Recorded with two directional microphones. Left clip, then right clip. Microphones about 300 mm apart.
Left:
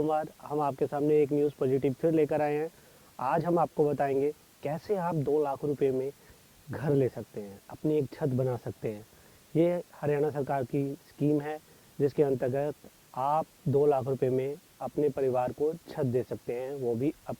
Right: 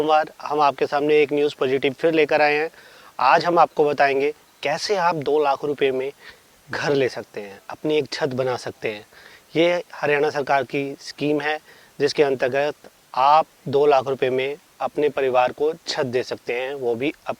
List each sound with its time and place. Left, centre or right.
0.0 s speech: centre
5.5 s speech: centre
16.7 s speech: right
17.0 s speech: centre